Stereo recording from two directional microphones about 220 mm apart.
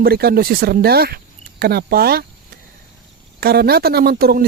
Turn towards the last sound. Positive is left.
turn(degrees=-45)  # may be behind; listen again after turning